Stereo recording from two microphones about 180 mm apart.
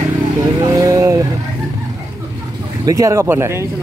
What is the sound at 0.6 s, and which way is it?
Vehicle, 20° right (ahead or behind).